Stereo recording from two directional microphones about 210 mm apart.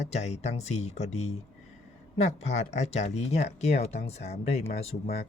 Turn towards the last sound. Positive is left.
turn(degrees=30)  # may be behind; listen again after turning